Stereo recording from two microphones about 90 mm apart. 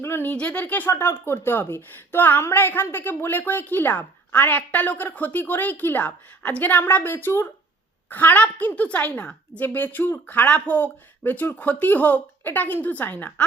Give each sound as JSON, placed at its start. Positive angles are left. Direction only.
{"t": 0.0, "sound": "speech", "side_deg": 25}